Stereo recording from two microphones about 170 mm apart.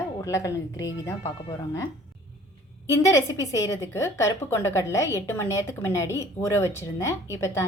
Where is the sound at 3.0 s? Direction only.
20° left (ahead or behind).